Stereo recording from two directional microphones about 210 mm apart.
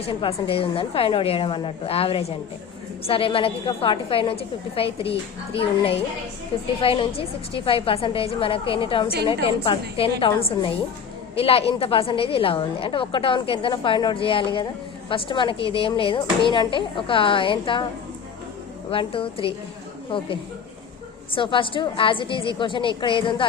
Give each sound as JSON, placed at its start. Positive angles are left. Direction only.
{"t": 0.1, "sound": "a woman's voice", "side_deg": 25}
{"t": 18.9, "sound": "a woman's voice", "side_deg": 25}